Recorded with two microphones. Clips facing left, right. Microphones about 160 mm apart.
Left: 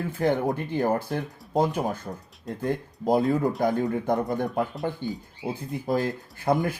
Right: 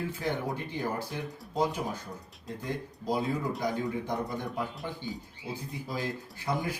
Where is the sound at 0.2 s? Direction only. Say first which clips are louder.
Left 13 dB; 50° left (ahead or behind).